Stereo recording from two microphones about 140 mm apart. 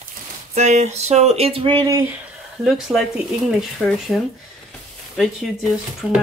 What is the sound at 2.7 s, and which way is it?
Speech, centre (ahead or behind).